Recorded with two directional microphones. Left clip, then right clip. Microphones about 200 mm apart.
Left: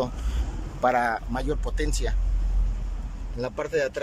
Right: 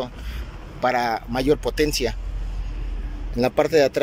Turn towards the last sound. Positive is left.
turn(degrees=-20)  # may be behind; listen again after turning